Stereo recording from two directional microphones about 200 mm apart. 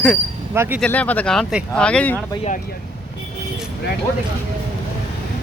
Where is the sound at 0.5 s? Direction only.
10° right (ahead or behind).